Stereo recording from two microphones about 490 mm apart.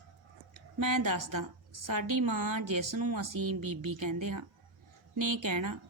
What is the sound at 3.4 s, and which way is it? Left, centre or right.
Speech, right.